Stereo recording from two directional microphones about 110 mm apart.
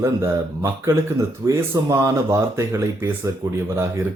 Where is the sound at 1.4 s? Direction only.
30° right (ahead or behind).